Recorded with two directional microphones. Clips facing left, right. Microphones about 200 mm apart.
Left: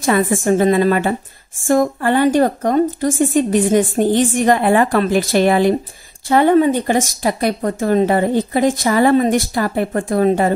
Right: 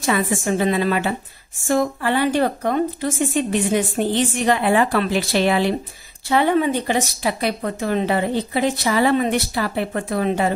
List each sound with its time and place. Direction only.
0.0 s speech: 50° left (ahead or behind)